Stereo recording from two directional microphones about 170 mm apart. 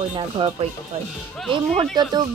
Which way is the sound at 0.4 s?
30° right (ahead or behind).